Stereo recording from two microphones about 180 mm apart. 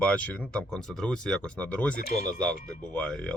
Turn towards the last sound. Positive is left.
turn(degrees=5)  # may be behind; listen again after turning